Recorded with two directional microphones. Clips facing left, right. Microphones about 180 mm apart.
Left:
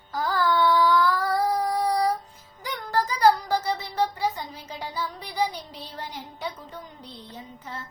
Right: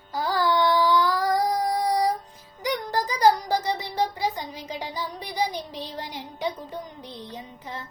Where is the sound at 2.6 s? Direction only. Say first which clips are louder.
Right 1 dB; 15° right (ahead or behind).